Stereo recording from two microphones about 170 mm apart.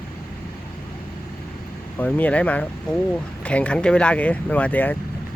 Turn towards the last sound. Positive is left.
turn(degrees=10)  # may be behind; listen again after turning